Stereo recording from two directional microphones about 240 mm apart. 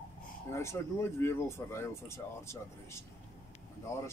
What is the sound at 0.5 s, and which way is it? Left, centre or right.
Speech, centre.